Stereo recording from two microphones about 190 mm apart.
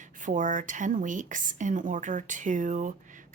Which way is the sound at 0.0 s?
40° right (ahead or behind).